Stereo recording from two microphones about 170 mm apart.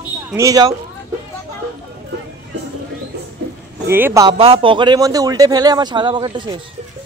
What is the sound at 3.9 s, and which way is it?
Speech, 15° right (ahead or behind).